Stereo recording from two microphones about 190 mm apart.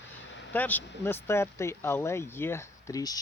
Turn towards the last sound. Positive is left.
turn(degrees=20)  # may be behind; listen again after turning